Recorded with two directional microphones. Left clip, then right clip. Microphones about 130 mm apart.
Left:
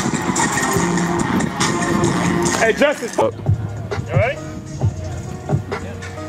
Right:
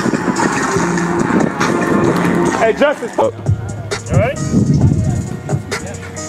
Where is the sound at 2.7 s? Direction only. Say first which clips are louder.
Right 3 dB; 20° left (ahead or behind).